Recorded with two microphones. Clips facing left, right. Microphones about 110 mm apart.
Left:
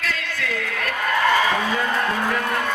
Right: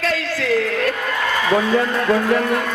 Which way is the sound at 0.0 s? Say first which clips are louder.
Right 6 dB; 30° right (ahead or behind).